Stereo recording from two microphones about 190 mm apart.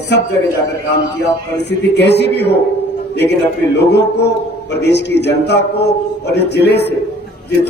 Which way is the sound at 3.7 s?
60° left (ahead or behind).